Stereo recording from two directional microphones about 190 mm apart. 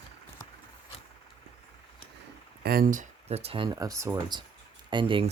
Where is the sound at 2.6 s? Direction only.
50° right (ahead or behind); by 5.3 s 25° right (ahead or behind).